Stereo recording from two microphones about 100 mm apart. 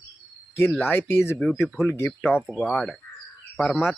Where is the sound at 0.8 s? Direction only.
20° left (ahead or behind).